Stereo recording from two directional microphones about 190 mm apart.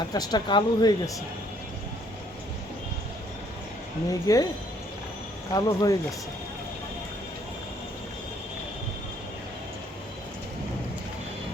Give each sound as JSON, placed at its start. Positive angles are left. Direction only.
{"t": 0.1, "sound": "speech", "side_deg": 20}
{"t": 4.1, "sound": "speech", "side_deg": 20}
{"t": 5.5, "sound": "speech", "side_deg": 20}